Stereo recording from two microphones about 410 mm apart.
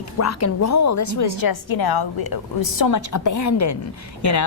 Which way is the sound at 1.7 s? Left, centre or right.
Left.